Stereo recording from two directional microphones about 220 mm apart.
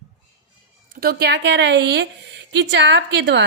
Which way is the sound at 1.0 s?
45° right (ahead or behind).